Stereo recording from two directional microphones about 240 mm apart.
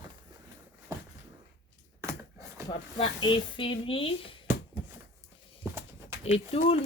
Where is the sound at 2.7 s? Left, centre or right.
Left.